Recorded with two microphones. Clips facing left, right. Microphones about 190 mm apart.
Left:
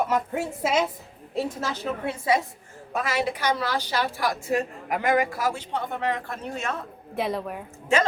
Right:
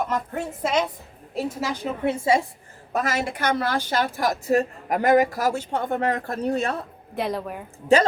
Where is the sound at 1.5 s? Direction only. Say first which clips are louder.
Right 2 dB; 15° right (ahead or behind).